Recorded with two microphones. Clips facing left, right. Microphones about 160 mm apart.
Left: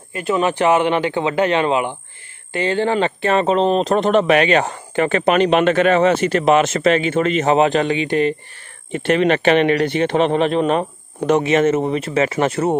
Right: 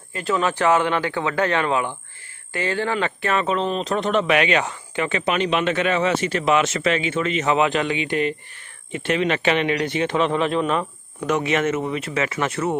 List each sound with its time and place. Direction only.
0.3 s speech: 15° left (ahead or behind); by 8.4 s 35° left (ahead or behind)
9.0 s a man's voice: 55° left (ahead or behind)
10.4 s speech: 25° left (ahead or behind)